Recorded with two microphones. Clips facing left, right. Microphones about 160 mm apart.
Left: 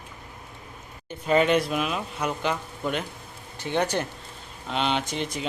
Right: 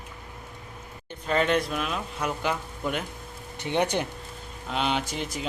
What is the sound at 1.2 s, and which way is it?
Speech, 5° left (ahead or behind).